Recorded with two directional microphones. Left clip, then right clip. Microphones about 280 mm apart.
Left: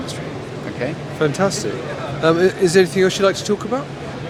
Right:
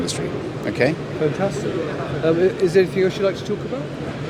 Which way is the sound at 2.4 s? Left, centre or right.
Left.